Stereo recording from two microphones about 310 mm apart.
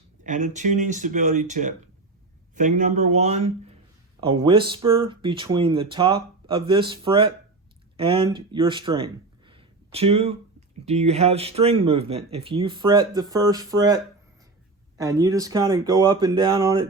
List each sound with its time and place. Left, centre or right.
0.3 s speech: right
9.5 s a sound: centre
10.8 s speech: right